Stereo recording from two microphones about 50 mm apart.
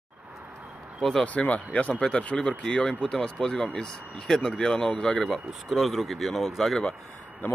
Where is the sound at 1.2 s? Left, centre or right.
Left.